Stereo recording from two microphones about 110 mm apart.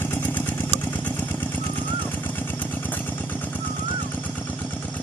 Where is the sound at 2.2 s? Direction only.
15° left (ahead or behind).